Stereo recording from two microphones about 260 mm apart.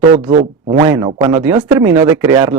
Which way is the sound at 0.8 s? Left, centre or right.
Centre.